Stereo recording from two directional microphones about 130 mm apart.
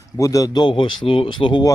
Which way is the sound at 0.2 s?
25° left (ahead or behind).